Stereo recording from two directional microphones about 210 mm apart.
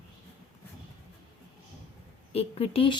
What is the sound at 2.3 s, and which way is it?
Speech, 30° left (ahead or behind).